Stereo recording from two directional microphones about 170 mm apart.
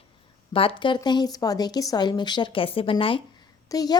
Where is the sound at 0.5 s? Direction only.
35° left (ahead or behind).